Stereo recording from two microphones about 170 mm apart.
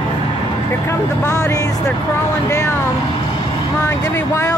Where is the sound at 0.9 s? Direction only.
15° left (ahead or behind).